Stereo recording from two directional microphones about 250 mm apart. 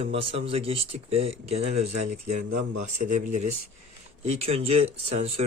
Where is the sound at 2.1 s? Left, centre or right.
Right.